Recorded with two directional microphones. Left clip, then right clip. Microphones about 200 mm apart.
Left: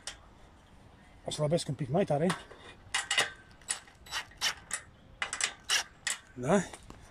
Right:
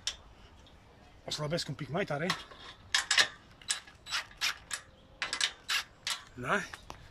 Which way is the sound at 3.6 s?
25° left (ahead or behind).